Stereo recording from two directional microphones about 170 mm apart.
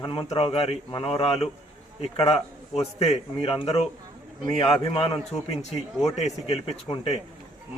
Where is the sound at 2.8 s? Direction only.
35° left (ahead or behind).